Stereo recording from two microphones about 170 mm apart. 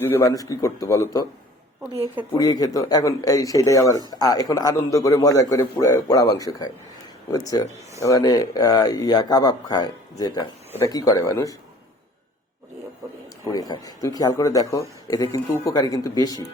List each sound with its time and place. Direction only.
0.0 s speech: 15° left (ahead or behind)
2.3 s speech: 20° left (ahead or behind)
13.4 s speech: 20° left (ahead or behind)